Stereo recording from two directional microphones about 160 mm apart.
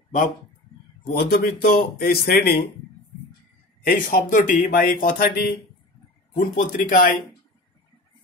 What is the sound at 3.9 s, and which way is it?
Speech, 55° left (ahead or behind).